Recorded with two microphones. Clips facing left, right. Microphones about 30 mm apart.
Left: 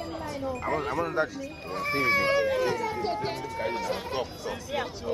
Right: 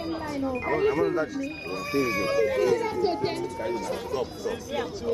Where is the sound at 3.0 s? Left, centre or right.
Centre.